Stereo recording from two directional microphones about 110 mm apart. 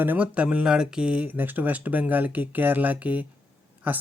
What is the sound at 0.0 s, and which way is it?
Speech, 15° right (ahead or behind).